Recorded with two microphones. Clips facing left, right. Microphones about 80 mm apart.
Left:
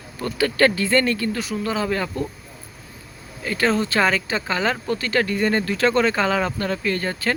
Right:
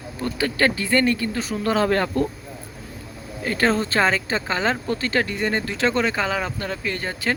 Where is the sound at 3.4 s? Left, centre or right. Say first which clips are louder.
Even; right.